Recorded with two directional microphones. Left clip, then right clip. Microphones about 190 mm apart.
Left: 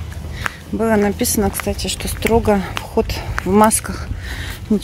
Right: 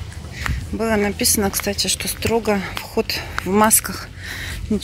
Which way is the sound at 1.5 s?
5° right (ahead or behind).